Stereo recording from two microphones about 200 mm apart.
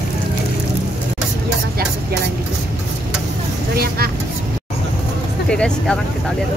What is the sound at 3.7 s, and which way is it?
Vehicle, 50° right (ahead or behind).